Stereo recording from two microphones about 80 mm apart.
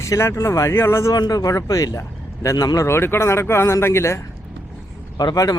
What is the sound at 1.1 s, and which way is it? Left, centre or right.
Speech, left.